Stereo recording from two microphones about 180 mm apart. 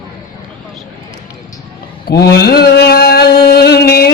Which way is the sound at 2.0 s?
65° left (ahead or behind).